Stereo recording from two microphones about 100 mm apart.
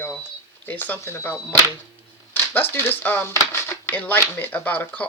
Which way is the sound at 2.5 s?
20° left (ahead or behind).